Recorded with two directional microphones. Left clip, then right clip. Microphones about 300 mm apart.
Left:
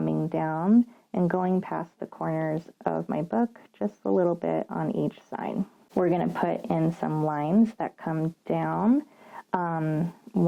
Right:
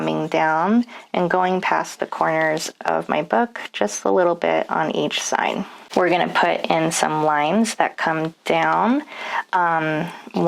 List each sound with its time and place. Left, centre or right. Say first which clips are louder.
0.0 s speech: right 9 dB; centre
4.0 s speech: right 7 dB; centre